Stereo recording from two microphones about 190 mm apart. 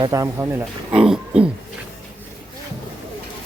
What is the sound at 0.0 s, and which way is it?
Speech, 15° right (ahead or behind).